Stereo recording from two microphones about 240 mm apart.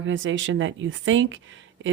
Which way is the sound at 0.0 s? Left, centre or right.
Right.